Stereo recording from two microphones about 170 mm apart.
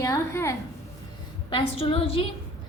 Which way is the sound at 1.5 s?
30° left (ahead or behind).